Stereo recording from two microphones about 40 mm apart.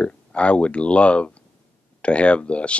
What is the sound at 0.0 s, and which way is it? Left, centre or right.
Speech, left.